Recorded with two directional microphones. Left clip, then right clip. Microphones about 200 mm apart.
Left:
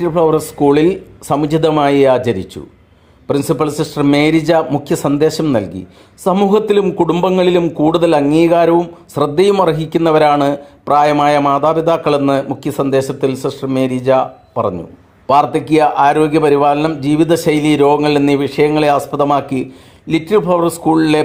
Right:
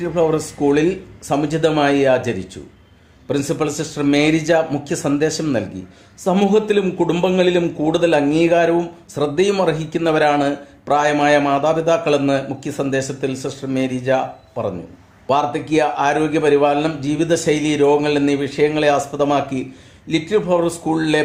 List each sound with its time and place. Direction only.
0.0 s a man's voice: 35° left (ahead or behind)